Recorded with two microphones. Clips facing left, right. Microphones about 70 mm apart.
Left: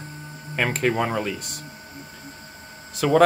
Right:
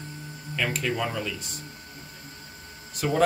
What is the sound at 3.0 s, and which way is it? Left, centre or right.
Speech, left.